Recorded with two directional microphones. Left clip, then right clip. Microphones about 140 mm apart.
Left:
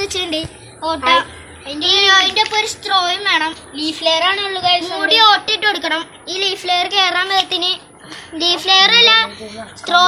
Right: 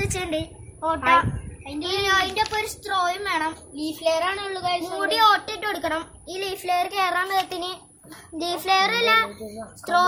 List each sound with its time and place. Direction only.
0.0 s a woman's voice: 5° right (ahead or behind)
1.9 s a woman's voice: 15° right (ahead or behind)
4.0 s a child's voice: 30° right (ahead or behind)
4.9 s a woman's voice: 10° right (ahead or behind)